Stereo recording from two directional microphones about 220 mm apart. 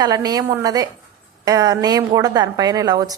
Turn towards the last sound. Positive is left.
turn(degrees=-15)  # may be behind; listen again after turning